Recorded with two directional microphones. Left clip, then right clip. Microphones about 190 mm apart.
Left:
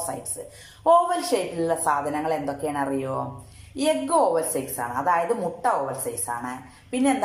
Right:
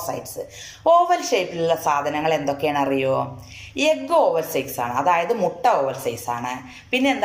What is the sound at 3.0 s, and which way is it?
Speech, centre (ahead or behind).